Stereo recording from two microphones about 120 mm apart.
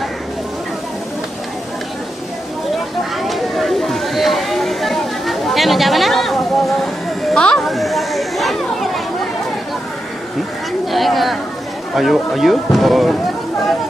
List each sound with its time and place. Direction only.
3.2 s a sound: centre (ahead or behind)
7.2 s chatter: 5° left (ahead or behind)
10.9 s chatter: centre (ahead or behind)
11.9 s speech: centre (ahead or behind)